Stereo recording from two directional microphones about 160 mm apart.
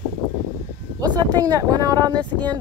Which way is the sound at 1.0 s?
25° right (ahead or behind).